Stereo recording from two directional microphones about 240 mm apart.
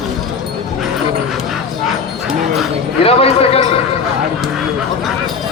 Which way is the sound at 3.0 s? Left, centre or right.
Left.